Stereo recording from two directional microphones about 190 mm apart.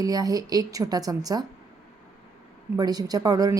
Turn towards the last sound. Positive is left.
turn(degrees=-20)  # may be behind; listen again after turning